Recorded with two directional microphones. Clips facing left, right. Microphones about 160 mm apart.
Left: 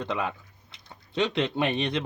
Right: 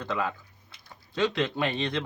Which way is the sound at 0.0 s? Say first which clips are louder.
Even; 20° left (ahead or behind).